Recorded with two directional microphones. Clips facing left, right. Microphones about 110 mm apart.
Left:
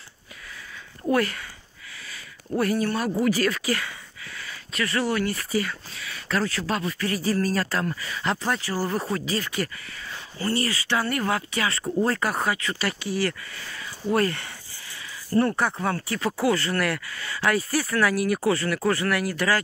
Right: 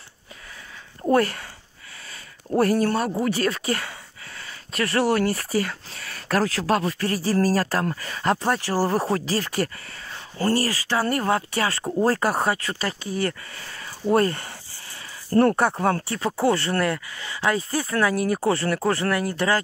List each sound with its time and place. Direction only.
1.2 s speech: 45° right (ahead or behind)
2.0 s a sound: 40° right (ahead or behind)
3.0 s a sound: 35° right (ahead or behind)
4.7 s speech: 60° right (ahead or behind)
5.2 s speech: 40° right (ahead or behind)
8.8 s speech: 40° right (ahead or behind)
15.3 s speech: 55° right (ahead or behind)
16.1 s speech: 25° right (ahead or behind)